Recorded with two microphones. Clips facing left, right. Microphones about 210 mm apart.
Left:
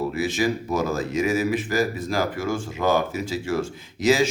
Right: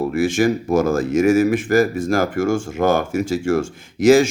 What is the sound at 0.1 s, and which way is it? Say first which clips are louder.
Speech: right 6 dB; 50° right (ahead or behind).